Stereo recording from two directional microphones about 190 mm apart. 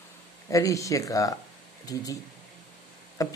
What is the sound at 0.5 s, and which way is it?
Speech, 15° left (ahead or behind).